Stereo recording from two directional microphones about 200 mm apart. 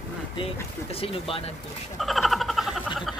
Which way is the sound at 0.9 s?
30° left (ahead or behind).